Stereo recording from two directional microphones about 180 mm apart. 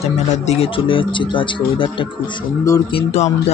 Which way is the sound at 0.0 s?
35° left (ahead or behind).